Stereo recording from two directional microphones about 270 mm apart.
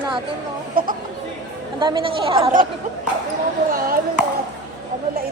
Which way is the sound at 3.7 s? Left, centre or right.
Right.